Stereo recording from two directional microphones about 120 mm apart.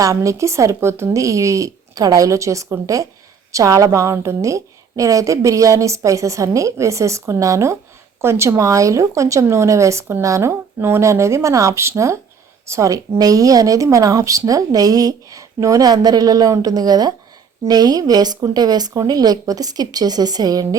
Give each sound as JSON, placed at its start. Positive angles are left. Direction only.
{"t": 0.0, "sound": "a woman's voice", "side_deg": -25}